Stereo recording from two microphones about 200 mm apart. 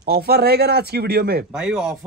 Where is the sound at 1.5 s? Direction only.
5° right (ahead or behind).